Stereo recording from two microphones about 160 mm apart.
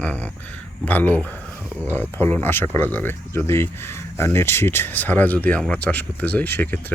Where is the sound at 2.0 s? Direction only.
10° left (ahead or behind).